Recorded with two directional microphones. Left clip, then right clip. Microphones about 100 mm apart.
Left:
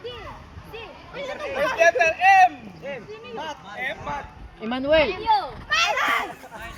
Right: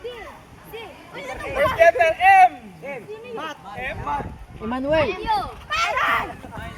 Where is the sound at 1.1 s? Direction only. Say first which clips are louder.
Left 1 dB; 30° left (ahead or behind).